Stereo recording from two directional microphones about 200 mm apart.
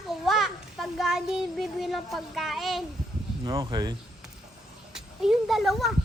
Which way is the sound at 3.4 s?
20° right (ahead or behind).